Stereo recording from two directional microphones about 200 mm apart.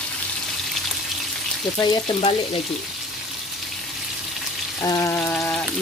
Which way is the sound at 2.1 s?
30° left (ahead or behind).